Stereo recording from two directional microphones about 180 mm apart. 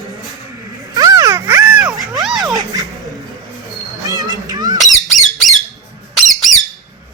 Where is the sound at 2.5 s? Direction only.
20° right (ahead or behind).